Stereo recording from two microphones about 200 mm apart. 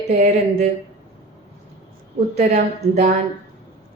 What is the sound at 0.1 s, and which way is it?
Speech, 35° right (ahead or behind).